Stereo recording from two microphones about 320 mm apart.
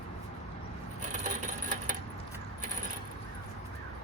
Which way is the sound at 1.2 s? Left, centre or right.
Right.